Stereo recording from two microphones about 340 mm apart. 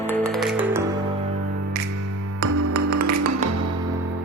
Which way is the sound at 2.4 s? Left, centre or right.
Right.